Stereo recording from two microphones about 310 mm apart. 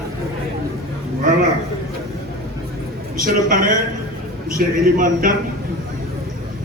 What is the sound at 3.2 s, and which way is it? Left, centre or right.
A man's voice, right.